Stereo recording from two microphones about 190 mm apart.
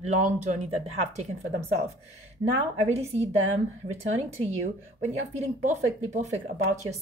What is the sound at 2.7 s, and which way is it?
A woman's voice, 35° right (ahead or behind).